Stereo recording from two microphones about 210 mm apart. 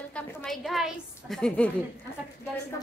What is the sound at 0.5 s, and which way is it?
Speech, centre (ahead or behind).